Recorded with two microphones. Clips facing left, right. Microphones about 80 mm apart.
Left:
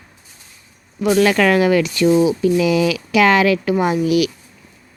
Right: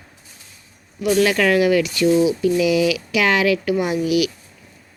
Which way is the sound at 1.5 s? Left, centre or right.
Left.